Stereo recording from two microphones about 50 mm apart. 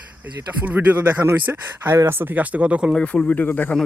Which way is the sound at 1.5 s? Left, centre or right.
Right.